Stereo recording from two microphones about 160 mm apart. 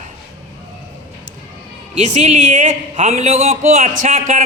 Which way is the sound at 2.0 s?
45° right (ahead or behind).